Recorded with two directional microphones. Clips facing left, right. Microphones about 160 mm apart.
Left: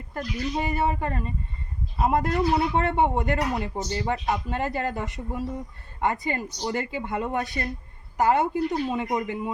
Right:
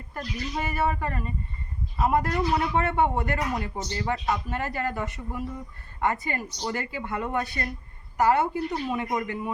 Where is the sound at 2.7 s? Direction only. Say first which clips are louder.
Left 1 dB; 20° left (ahead or behind).